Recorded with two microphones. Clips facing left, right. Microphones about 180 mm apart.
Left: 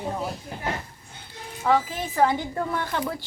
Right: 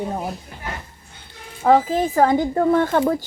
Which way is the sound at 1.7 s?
45° right (ahead or behind).